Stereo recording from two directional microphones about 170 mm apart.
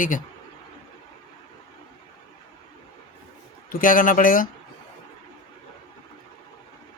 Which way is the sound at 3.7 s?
55° left (ahead or behind).